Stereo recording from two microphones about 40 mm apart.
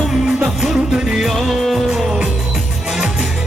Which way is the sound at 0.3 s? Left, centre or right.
Centre.